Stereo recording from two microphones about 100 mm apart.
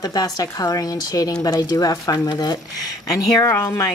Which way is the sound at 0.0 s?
40° left (ahead or behind).